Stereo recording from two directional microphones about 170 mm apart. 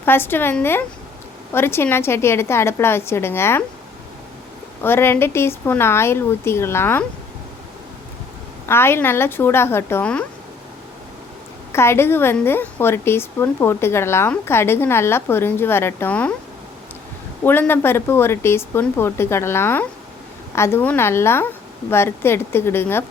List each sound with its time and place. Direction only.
0.0 s a woman's voice: 15° left (ahead or behind)
4.8 s a woman's voice: 15° left (ahead or behind)
8.6 s a woman's voice: 15° left (ahead or behind)
11.7 s a woman's voice: 15° left (ahead or behind)
17.4 s a woman's voice: 10° left (ahead or behind)